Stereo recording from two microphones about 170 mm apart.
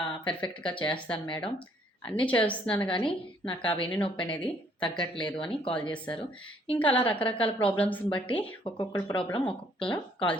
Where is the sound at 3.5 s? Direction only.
10° left (ahead or behind).